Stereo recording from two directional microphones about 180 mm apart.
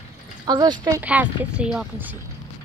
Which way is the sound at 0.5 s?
25° right (ahead or behind).